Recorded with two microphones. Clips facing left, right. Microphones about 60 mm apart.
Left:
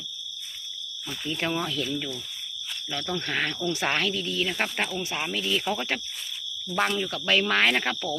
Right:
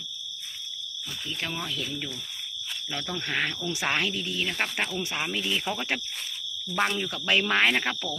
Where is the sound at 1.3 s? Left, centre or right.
Left.